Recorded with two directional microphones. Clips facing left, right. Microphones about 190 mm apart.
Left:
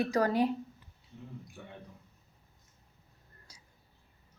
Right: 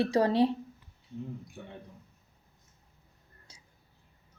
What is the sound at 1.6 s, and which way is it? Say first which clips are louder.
Speech: right 3 dB; 25° right (ahead or behind).